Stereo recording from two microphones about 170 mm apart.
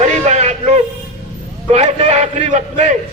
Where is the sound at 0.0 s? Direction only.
45° right (ahead or behind).